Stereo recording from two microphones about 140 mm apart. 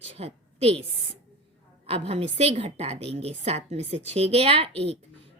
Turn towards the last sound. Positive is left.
turn(degrees=-45)  # may be behind; listen again after turning